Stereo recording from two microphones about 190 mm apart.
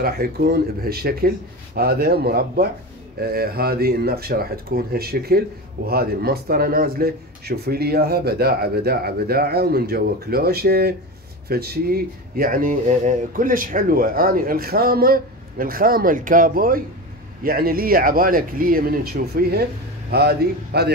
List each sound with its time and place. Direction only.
0.0 s speech: 55° right (ahead or behind)